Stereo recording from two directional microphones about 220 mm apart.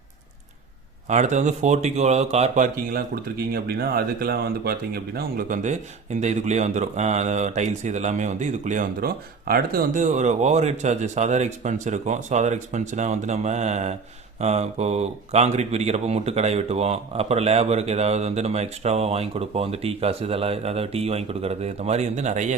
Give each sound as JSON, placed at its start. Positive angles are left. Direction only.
{"t": 1.0, "sound": "speech", "side_deg": -30}